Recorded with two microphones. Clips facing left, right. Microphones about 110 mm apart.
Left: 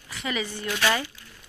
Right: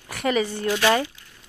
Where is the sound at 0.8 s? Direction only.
30° right (ahead or behind).